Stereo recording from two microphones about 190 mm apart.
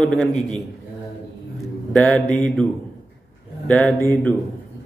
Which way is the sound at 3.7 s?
5° left (ahead or behind).